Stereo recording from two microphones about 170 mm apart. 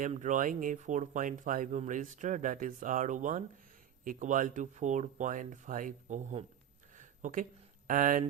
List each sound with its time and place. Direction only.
0.0 s speech: 45° right (ahead or behind)
6.9 s a sound: 50° right (ahead or behind)
7.9 s speech: 55° right (ahead or behind)